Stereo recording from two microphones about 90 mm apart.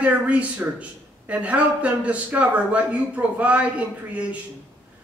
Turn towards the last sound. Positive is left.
turn(degrees=-15)  # may be behind; listen again after turning